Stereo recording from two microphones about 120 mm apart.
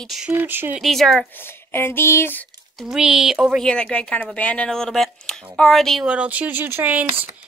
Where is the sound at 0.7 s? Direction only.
Centre (ahead or behind).